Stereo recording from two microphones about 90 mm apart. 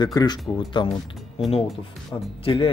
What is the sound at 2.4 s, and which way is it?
Speech, 90° left.